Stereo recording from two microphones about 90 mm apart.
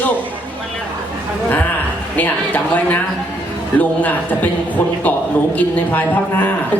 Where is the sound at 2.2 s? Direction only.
20° left (ahead or behind).